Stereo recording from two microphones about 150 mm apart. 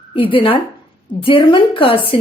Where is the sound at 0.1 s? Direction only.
35° left (ahead or behind).